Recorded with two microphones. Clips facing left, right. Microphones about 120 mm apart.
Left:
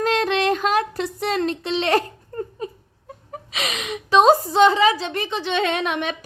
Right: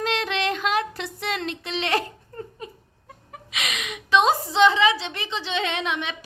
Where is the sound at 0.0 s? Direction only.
45° left (ahead or behind).